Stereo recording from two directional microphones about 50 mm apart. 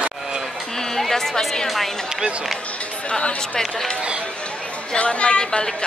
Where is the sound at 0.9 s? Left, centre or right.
Centre.